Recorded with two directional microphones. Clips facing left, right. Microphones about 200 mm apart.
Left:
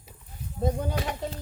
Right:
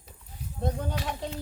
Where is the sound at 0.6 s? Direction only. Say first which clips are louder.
Left 3 dB; 10° left (ahead or behind).